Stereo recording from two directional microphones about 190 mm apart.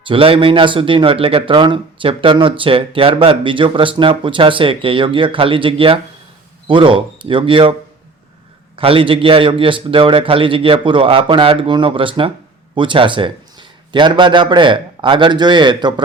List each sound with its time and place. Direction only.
0.0 s a man's voice: 30° right (ahead or behind)